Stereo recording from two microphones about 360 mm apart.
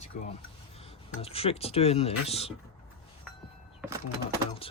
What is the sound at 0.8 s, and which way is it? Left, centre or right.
Speech, centre.